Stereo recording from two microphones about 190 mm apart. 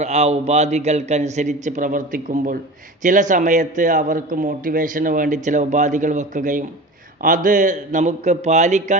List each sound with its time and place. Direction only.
0.0 s a man's voice: 35° right (ahead or behind)